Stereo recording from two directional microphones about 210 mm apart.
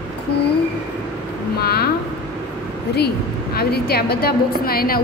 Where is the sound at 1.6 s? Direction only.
50° left (ahead or behind).